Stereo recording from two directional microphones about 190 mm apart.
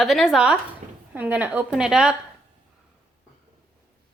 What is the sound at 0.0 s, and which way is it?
A woman's voice, centre (ahead or behind).